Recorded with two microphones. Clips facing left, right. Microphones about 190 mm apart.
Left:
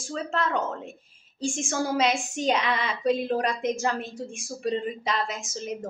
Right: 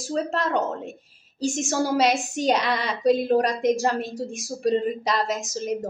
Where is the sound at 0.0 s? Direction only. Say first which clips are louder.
Right 3 dB; 40° right (ahead or behind).